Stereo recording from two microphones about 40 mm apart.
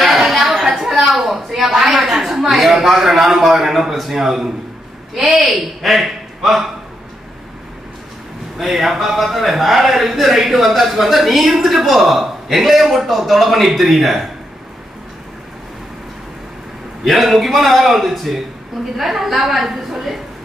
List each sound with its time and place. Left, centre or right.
0.0 s a sound: centre
5.1 s a man's voice: centre
8.5 s a man's voice: centre
17.0 s a man's voice: centre